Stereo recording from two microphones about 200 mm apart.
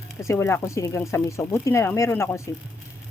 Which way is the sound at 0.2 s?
15° left (ahead or behind).